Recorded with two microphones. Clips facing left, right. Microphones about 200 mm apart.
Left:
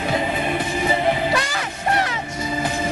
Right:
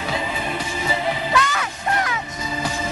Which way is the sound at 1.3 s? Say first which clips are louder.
Right 1 dB; 35° left (ahead or behind).